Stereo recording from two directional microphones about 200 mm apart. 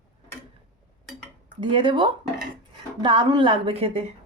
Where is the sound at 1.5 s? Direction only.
25° right (ahead or behind).